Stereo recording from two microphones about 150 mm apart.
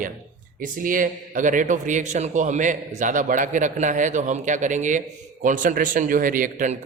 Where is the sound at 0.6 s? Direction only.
65° right (ahead or behind).